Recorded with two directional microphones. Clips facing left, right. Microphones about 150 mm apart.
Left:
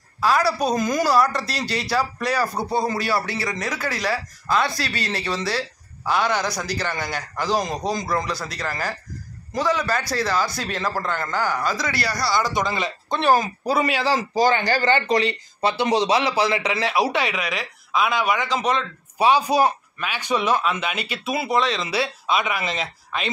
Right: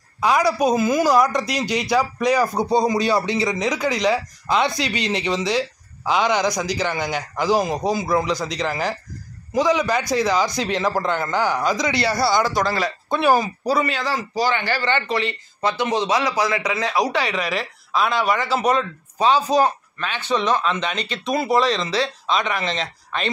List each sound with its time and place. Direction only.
0.2 s speech: 15° right (ahead or behind)
13.1 s speech: 5° right (ahead or behind)
14.3 s speech: 45° left (ahead or behind); by 17.3 s 25° left (ahead or behind)
17.3 s speech: centre (ahead or behind)
19.1 s a man's voice: 10° left (ahead or behind)